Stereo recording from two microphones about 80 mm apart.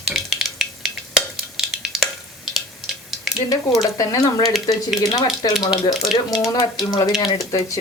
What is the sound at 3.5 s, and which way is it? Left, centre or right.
Speech, left.